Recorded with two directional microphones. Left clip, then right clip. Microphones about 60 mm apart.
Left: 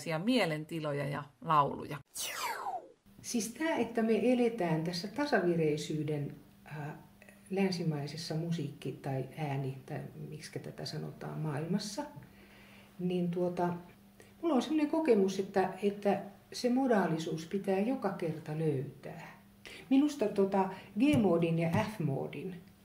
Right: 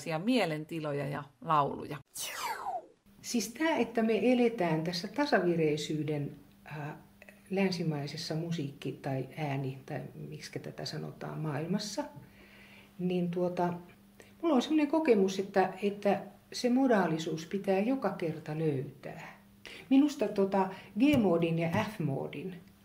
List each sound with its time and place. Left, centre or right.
0.0 s speech: centre
2.1 s music: centre
3.3 s speech: right